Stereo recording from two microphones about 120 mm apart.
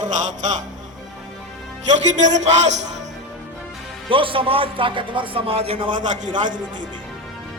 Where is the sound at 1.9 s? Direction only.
80° right.